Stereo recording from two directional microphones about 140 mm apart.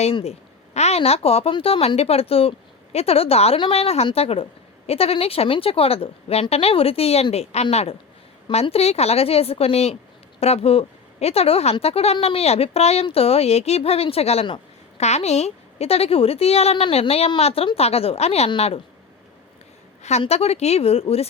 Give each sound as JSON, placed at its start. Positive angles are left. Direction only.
{"t": 0.0, "sound": "speech", "side_deg": 45}
{"t": 20.0, "sound": "speech", "side_deg": 50}